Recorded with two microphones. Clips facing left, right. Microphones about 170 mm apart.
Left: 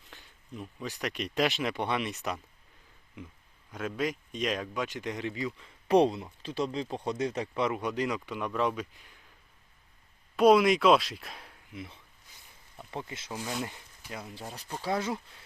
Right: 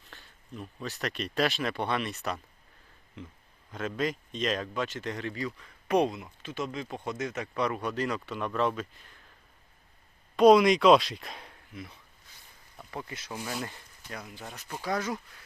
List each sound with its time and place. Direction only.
0.1 s a sound: 15° left (ahead or behind)
0.8 s speech: 15° left (ahead or behind)
10.3 s speech: 5° left (ahead or behind)
11.7 s speech: 25° left (ahead or behind)
14.3 s speech: 30° left (ahead or behind)